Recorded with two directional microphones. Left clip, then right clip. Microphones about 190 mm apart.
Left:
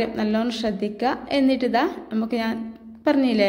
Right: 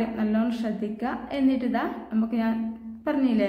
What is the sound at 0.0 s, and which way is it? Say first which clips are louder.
A woman's voice: left 4 dB; 35° left (ahead or behind).